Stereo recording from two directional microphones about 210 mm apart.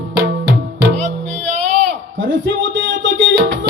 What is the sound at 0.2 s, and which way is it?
Music, 50° right (ahead or behind).